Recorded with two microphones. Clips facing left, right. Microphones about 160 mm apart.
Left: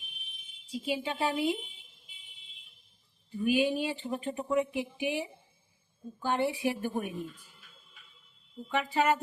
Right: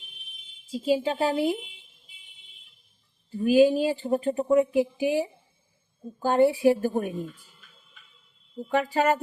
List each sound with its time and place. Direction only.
0.7 s speech: 40° right (ahead or behind)
3.3 s speech: 40° right (ahead or behind)
8.7 s speech: 40° right (ahead or behind)